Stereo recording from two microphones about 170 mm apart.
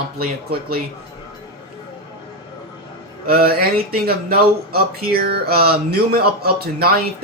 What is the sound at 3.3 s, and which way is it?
Speech, 60° right (ahead or behind).